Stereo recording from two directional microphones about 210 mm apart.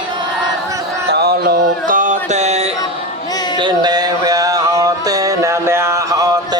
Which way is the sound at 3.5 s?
20° right (ahead or behind).